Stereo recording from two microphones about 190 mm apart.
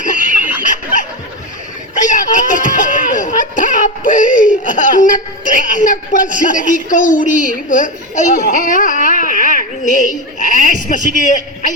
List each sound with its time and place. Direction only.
0.0 s snicker: 45° left (ahead or behind)
2.0 s a sound: 45° left (ahead or behind)
5.5 s a woman's voice: 45° left (ahead or behind)